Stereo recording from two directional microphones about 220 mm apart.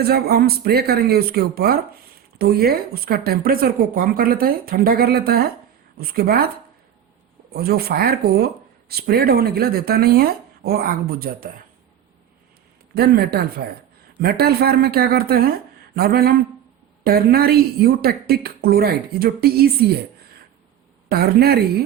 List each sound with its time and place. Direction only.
0.0 s a woman's voice: 45° right (ahead or behind)
7.5 s a woman's voice: 45° right (ahead or behind)
12.9 s a woman's voice: 45° right (ahead or behind)
21.1 s a woman's voice: 45° right (ahead or behind)